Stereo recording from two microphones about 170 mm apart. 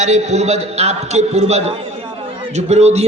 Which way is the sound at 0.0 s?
40° right (ahead or behind).